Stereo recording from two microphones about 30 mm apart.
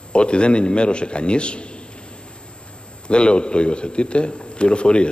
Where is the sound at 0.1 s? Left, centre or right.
Left.